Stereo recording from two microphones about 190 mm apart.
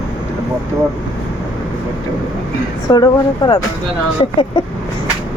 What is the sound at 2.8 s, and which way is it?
Speech, 20° left (ahead or behind).